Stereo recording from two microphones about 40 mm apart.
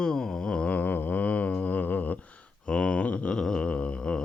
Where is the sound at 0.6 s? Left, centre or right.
Left.